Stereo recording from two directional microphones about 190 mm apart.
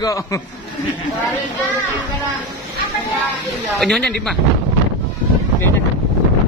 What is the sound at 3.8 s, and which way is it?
Speech, 5° left (ahead or behind).